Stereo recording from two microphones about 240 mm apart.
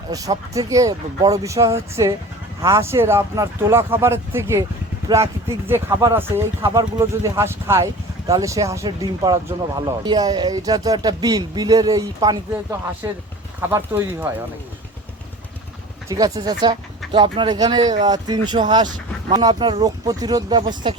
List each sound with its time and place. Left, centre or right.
0.1 s speech: centre
16.0 s speech: centre